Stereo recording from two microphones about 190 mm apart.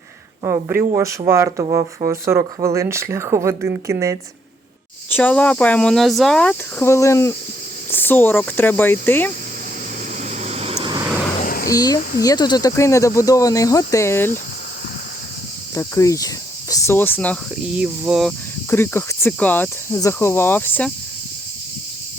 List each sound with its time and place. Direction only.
0.4 s speech: 15° right (ahead or behind)
5.0 s speech: 10° left (ahead or behind)
10.2 s vehicle: 40° right (ahead or behind)
10.8 s vehicle: 20° right (ahead or behind)
11.3 s a sound: 45° left (ahead or behind)
11.7 s speech: 20° left (ahead or behind)
15.7 s speech: 15° left (ahead or behind)
17.7 s speech: 5° right (ahead or behind)
18.7 s speech: 10° left (ahead or behind)